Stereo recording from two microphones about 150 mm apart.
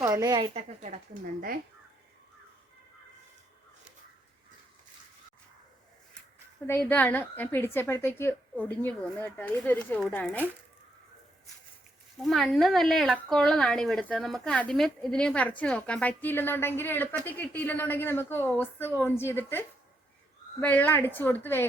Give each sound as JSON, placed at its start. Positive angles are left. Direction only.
{"t": 0.0, "sound": "a woman's voice", "side_deg": -25}
{"t": 0.5, "sound": "speech", "side_deg": -50}
{"t": 1.2, "sound": "speech", "side_deg": -75}
{"t": 6.7, "sound": "a woman's voice", "side_deg": 15}
{"t": 12.2, "sound": "a woman's voice", "side_deg": 0}